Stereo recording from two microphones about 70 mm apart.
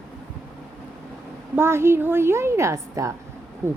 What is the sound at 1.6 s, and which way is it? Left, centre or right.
A woman's voice, right.